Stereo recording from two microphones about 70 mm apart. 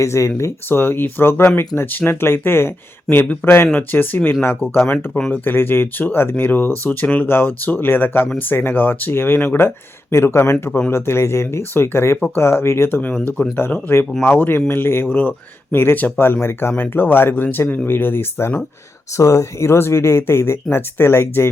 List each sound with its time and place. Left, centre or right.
0.0 s speech: left
3.7 s speech: left
10.7 s speech: centre
10.9 s speech: left
13.2 s speech: left
19.1 s speech: left